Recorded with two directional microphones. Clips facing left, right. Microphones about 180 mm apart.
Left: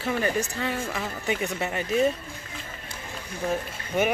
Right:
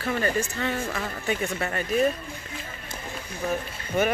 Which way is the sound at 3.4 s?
15° left (ahead or behind).